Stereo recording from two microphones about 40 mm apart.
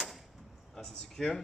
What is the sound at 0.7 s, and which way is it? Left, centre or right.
Speech, centre.